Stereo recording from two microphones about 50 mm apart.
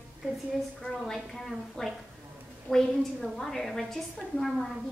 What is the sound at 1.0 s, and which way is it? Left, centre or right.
A woman's voice, centre.